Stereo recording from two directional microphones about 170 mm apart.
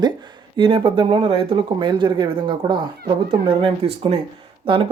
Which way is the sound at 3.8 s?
35° right (ahead or behind).